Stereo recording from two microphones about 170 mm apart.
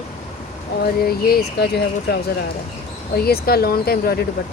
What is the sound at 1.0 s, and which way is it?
Speech, 65° left (ahead or behind).